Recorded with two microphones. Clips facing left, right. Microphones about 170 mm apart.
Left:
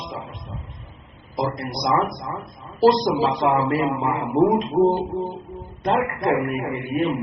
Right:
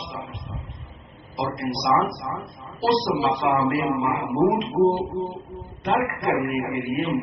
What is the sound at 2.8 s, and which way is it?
A man's voice, 35° left (ahead or behind).